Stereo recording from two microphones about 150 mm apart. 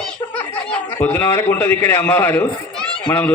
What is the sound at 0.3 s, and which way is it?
A man's voice, 10° left (ahead or behind).